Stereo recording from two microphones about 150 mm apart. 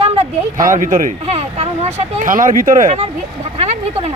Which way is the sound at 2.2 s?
65° right (ahead or behind).